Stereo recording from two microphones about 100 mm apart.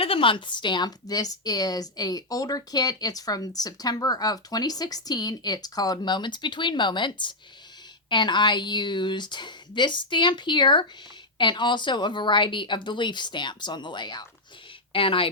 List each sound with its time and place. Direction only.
0.0 s a woman's voice: 65° left (ahead or behind); by 14.3 s 50° left (ahead or behind)
14.9 s speech: 65° left (ahead or behind)